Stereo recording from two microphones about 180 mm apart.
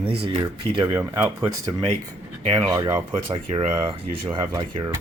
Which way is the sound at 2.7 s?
20° right (ahead or behind).